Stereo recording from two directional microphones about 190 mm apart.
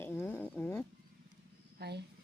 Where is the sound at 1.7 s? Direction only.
60° right (ahead or behind).